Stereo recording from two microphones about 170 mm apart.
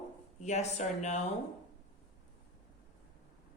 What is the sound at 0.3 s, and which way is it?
Speech, 45° left (ahead or behind).